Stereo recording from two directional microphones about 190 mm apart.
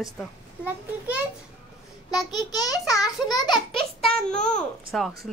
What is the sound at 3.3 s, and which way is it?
Speech, 25° left (ahead or behind).